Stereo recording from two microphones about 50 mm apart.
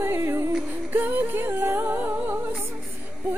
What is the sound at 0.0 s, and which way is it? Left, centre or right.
Music, right.